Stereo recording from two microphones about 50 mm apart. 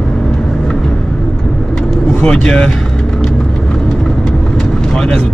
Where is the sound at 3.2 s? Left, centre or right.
Centre.